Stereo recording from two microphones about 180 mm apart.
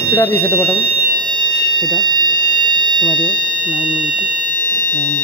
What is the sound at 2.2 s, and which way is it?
Smoke detector, 25° right (ahead or behind).